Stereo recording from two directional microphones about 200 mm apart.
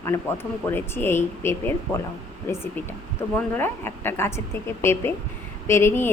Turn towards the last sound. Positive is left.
turn(degrees=10)  # may be behind; listen again after turning